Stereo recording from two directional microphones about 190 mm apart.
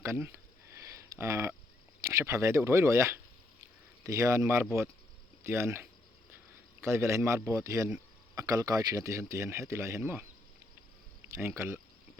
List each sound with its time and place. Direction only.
0.0 s speech: 15° right (ahead or behind)
0.8 s a sound: 15° right (ahead or behind)
2.0 s speech: 15° right (ahead or behind)
11.3 s speech: 15° right (ahead or behind)